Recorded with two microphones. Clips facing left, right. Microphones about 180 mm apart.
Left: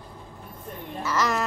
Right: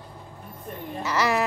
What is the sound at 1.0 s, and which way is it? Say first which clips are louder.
Speech: right 2 dB; 10° right (ahead or behind).